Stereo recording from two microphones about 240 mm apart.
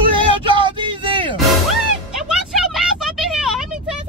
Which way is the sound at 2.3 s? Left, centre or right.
Centre.